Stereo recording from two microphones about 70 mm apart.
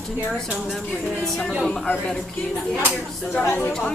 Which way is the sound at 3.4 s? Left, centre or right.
Centre.